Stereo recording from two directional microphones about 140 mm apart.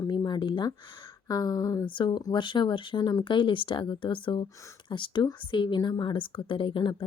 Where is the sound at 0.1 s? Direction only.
30° left (ahead or behind).